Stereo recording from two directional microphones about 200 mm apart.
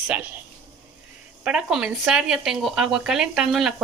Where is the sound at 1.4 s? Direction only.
5° right (ahead or behind).